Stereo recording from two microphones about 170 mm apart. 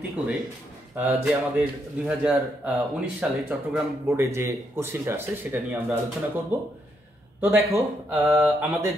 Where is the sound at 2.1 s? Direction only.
5° right (ahead or behind).